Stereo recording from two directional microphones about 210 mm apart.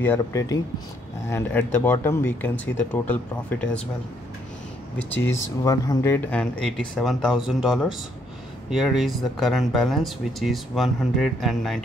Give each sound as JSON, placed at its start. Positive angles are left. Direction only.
{"t": 0.0, "sound": "speech", "side_deg": 15}
{"t": 4.9, "sound": "speech", "side_deg": 10}